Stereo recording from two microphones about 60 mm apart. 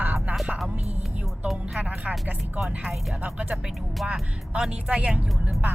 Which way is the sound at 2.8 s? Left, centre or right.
Centre.